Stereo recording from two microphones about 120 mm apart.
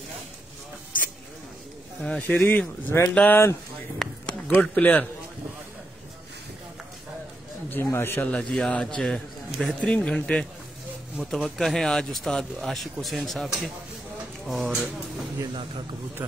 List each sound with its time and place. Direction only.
2.0 s a man's voice: 10° left (ahead or behind)
4.0 s a sound: 10° left (ahead or behind)
7.7 s a man's voice: 20° left (ahead or behind); by 14.9 s 5° right (ahead or behind)
16.2 s a man's voice: 15° right (ahead or behind)